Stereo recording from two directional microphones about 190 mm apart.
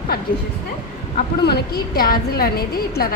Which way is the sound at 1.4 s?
55° left (ahead or behind).